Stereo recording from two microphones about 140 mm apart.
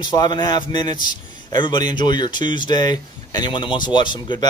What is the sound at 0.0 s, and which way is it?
Speech, 30° left (ahead or behind).